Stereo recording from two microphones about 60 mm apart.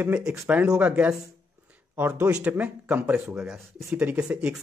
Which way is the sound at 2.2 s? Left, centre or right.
Right.